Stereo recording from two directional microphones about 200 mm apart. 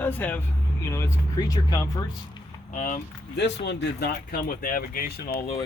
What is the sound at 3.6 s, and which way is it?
Speech, 60° left (ahead or behind).